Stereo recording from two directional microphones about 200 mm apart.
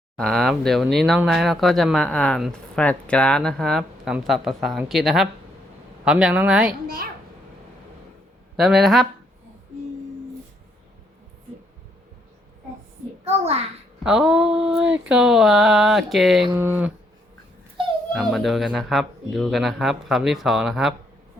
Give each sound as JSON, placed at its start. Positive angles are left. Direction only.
{"t": 0.2, "sound": "speech", "side_deg": 0}
{"t": 6.8, "sound": "a child's voice", "side_deg": -50}
{"t": 8.5, "sound": "speech", "side_deg": 0}
{"t": 13.2, "sound": "a child's voice", "side_deg": -30}
{"t": 14.0, "sound": "speech", "side_deg": -5}
{"t": 18.1, "sound": "speech", "side_deg": 0}